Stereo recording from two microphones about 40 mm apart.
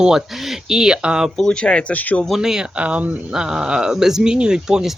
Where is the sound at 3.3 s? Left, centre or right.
Centre.